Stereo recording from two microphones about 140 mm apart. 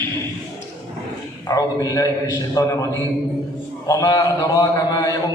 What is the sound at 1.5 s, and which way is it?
A man's voice, 25° left (ahead or behind).